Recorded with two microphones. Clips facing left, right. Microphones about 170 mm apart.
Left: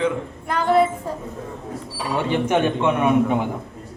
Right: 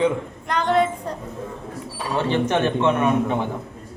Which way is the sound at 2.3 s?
10° left (ahead or behind).